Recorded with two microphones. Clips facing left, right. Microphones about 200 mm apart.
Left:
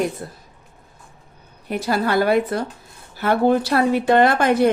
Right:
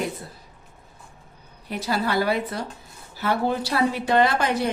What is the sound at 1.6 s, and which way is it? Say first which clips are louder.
A woman's voice: left 4 dB; 50° left (ahead or behind).